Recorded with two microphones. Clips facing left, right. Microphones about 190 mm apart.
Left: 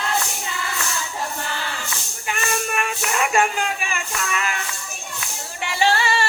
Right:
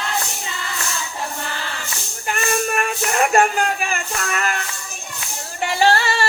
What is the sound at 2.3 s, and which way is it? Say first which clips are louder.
Music: right 4 dB; 45° right (ahead or behind).